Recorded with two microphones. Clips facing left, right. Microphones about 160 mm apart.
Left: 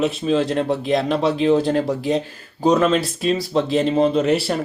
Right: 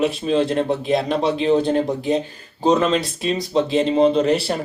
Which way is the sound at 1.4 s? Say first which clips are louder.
Left 1 dB; 20° right (ahead or behind).